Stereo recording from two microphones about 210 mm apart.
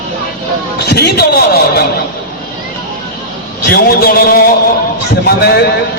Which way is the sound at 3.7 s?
45° left (ahead or behind).